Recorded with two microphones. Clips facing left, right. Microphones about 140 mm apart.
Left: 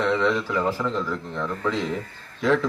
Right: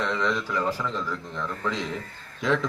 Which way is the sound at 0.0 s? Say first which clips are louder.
Left 5 dB; 10° left (ahead or behind).